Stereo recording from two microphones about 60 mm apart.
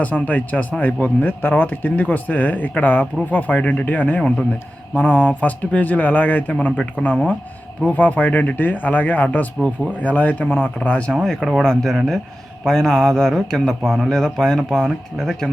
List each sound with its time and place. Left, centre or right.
0.0 s speech: left
11.1 s a man's voice: centre
11.3 s speech: centre
11.6 s a man's voice: centre